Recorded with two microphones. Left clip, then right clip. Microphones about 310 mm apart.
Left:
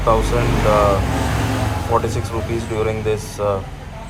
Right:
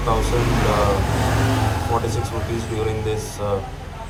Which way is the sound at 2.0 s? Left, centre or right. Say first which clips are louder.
Left 2 dB; centre.